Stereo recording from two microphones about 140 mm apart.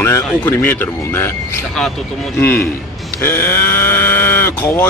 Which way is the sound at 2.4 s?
15° left (ahead or behind).